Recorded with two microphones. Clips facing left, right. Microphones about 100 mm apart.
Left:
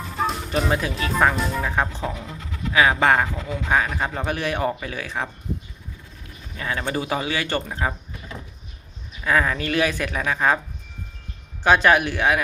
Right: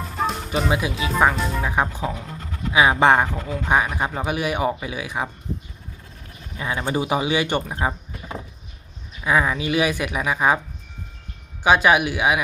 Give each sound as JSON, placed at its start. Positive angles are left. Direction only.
{"t": 0.0, "sound": "speech", "side_deg": 0}
{"t": 1.7, "sound": "a man's voice", "side_deg": -10}
{"t": 2.9, "sound": "speech", "side_deg": -20}
{"t": 3.8, "sound": "a man's voice", "side_deg": -10}
{"t": 6.6, "sound": "a man's voice", "side_deg": -15}
{"t": 9.2, "sound": "a man's voice", "side_deg": -10}
{"t": 11.6, "sound": "a man's voice", "side_deg": -5}